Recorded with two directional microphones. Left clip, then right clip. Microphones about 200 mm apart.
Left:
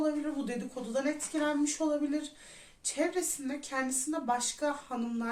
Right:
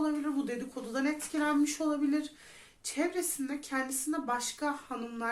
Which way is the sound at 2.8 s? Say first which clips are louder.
Left 1 dB; 30° right (ahead or behind).